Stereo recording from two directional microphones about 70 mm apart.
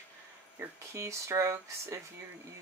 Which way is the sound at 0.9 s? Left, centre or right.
Right.